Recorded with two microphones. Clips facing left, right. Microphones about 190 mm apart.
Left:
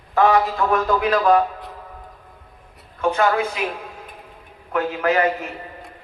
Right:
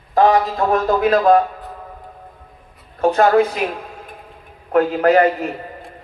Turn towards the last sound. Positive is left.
turn(degrees=-35)  # may be behind; listen again after turning